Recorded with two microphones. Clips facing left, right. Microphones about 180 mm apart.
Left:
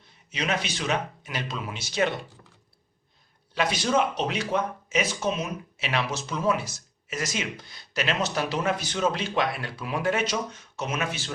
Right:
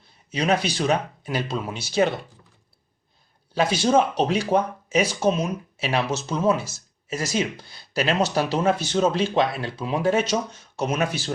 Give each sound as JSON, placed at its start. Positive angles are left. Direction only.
{"t": 0.3, "sound": "speech", "side_deg": -35}
{"t": 3.5, "sound": "speech", "side_deg": -30}